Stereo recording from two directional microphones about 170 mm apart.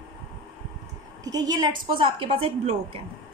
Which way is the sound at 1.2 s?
20° right (ahead or behind).